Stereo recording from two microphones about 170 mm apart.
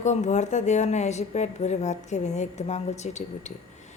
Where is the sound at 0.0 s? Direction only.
45° left (ahead or behind).